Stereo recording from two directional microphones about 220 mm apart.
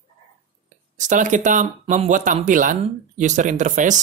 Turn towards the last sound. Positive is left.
turn(degrees=-35)  # may be behind; listen again after turning